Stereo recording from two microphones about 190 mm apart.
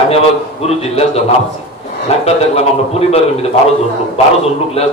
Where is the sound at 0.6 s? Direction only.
35° left (ahead or behind).